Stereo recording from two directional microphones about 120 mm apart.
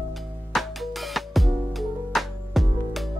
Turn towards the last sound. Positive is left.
turn(degrees=0)  # may be behind; listen again after turning